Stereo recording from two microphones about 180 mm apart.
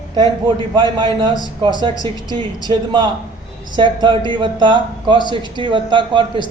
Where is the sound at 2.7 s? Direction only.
25° right (ahead or behind).